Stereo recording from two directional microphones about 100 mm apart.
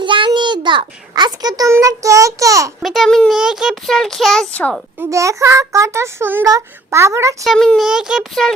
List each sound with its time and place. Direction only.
0.0 s a sound: 55° right (ahead or behind)
0.3 s a child's voice: 50° right (ahead or behind); by 2.7 s 30° right (ahead or behind)
2.8 s speech: centre (ahead or behind)
5.1 s a child's voice: 30° right (ahead or behind)
7.4 s speech: 5° left (ahead or behind)
7.9 s speech: 5° right (ahead or behind)